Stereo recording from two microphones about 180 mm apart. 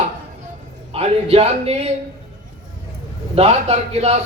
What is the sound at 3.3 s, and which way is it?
Speech, 35° right (ahead or behind).